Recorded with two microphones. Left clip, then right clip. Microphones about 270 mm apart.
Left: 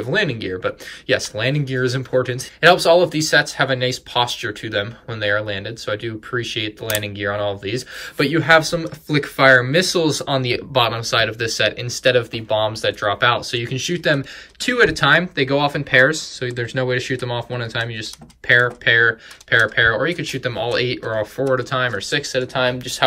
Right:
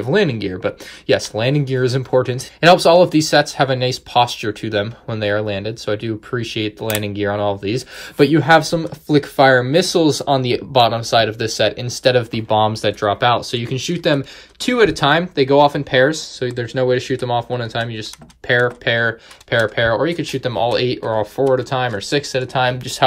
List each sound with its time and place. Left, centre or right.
0.1 s speech: centre